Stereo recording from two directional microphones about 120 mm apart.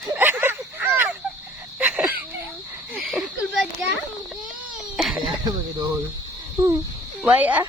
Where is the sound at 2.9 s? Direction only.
5° right (ahead or behind).